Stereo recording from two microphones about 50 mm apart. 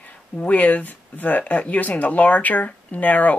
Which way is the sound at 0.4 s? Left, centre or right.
Left.